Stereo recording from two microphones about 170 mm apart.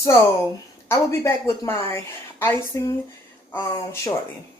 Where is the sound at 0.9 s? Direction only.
15° left (ahead or behind).